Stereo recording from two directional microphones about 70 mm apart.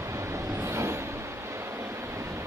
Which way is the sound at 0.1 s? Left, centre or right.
Right.